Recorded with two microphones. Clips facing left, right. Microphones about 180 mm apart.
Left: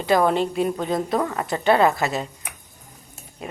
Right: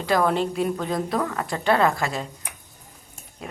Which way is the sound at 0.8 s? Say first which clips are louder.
Left 2 dB; 20° left (ahead or behind).